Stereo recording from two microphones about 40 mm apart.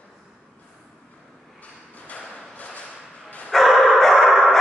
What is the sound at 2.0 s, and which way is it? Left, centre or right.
Thump, left.